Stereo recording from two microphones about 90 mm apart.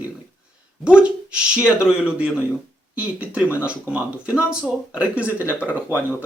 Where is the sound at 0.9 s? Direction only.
10° right (ahead or behind).